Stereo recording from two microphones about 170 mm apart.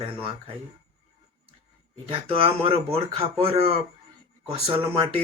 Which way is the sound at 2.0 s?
35° right (ahead or behind).